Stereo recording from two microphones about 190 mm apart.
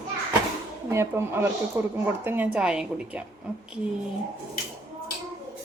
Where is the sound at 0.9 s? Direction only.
15° right (ahead or behind).